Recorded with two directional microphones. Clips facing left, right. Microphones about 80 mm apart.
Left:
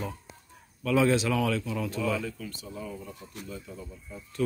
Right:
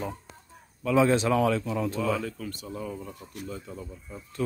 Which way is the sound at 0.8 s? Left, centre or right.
Right.